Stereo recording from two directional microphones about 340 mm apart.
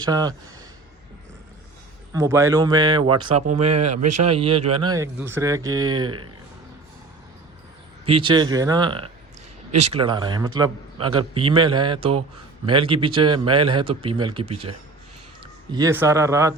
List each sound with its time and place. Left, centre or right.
0.0 s speech: centre
2.1 s speech: centre
6.1 s speech: right
8.0 s speech: centre
15.7 s speech: centre